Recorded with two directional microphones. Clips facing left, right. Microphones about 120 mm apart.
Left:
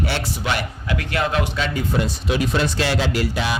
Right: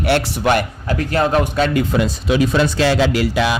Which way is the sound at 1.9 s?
90° right.